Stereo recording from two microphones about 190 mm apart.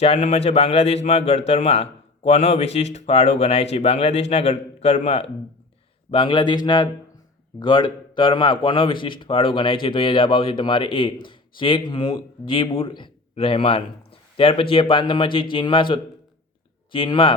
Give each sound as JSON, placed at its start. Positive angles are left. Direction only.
{"t": 0.0, "sound": "a man's voice", "side_deg": 35}